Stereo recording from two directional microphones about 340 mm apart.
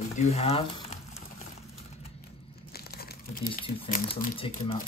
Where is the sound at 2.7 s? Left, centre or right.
Left.